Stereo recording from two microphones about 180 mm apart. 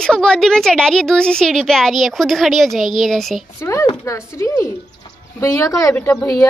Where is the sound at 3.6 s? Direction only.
15° left (ahead or behind).